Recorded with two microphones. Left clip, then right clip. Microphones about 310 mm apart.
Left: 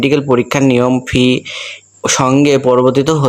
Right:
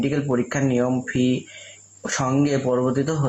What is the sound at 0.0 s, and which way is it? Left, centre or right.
Speech, left.